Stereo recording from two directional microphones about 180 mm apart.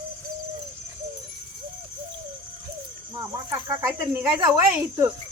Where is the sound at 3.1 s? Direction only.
20° right (ahead or behind).